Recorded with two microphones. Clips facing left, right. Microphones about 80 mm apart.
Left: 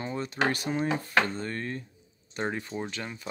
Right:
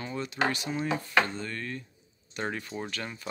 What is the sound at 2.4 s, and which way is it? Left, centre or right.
Speech, centre.